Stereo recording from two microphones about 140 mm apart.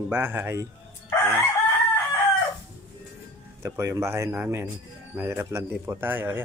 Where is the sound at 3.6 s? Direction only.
20° right (ahead or behind).